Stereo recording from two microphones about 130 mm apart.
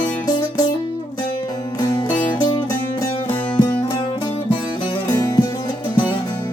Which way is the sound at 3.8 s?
40° left (ahead or behind).